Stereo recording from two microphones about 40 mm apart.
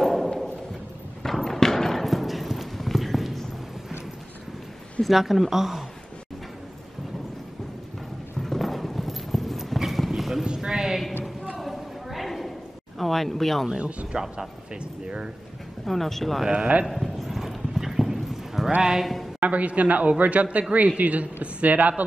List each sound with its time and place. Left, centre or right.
0.0 s a sound: centre
1.2 s clip-clop: centre
5.0 s speech: centre
8.4 s clip-clop: centre
10.4 s a sound: centre
11.5 s a sound: centre
13.7 s speech: right
14.1 s speech: centre
15.8 s speech: centre
16.4 s speech: right
16.8 s clip-clop: centre
17.4 s clip-clop: centre
18.8 s speech: centre
19.4 s speech: right